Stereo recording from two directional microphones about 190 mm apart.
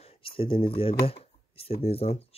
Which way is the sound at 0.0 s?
30° left (ahead or behind).